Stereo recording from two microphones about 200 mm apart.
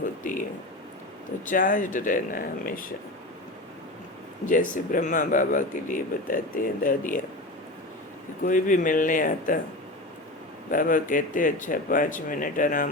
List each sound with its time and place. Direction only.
1.5 s speech: 40° left (ahead or behind)
4.4 s speech: 40° left (ahead or behind)
8.4 s speech: 40° left (ahead or behind)
10.7 s speech: 45° left (ahead or behind)